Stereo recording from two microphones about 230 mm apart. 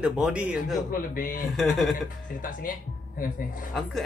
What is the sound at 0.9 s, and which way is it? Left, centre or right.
Speech, left.